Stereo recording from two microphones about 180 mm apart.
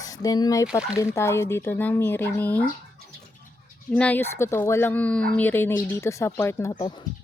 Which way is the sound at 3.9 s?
10° left (ahead or behind).